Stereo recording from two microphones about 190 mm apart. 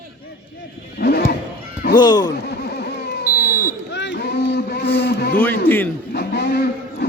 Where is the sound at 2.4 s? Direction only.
60° left (ahead or behind).